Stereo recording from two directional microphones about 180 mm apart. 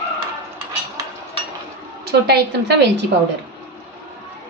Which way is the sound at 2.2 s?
70° right (ahead or behind).